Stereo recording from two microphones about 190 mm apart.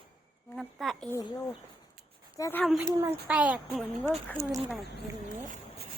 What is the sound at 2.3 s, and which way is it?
Speech, 15° left (ahead or behind).